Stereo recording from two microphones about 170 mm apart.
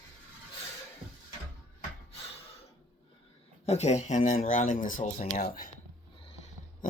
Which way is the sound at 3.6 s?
40° left (ahead or behind).